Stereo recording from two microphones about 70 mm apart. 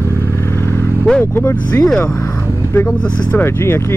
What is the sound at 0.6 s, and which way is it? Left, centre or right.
Vehicle, left.